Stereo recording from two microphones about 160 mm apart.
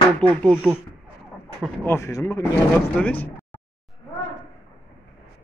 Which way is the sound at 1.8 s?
15° left (ahead or behind).